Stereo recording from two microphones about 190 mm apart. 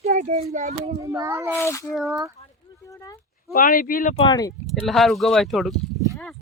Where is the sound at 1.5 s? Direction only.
15° left (ahead or behind).